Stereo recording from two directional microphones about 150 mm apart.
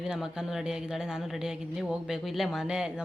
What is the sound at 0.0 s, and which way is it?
Speech, 5° right (ahead or behind).